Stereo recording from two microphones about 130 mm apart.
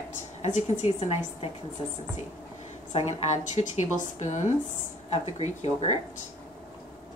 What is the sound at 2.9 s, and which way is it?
A woman's voice, 60° left (ahead or behind).